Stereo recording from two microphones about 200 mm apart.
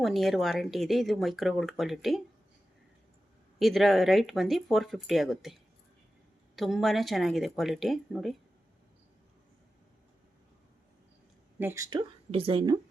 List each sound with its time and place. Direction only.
0.0 s speech: centre (ahead or behind)
3.6 s speech: centre (ahead or behind)
6.6 s speech: centre (ahead or behind)
11.6 s speech: 15° right (ahead or behind)